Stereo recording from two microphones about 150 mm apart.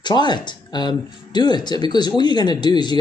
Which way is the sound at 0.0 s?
30° left (ahead or behind).